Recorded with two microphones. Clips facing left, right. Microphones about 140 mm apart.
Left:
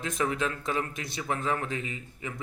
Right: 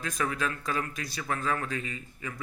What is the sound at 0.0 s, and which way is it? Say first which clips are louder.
A man's voice: left 2 dB; 25° left (ahead or behind).